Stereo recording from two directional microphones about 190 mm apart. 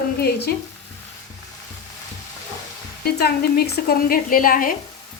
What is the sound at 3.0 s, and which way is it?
A woman's voice, 55° left (ahead or behind).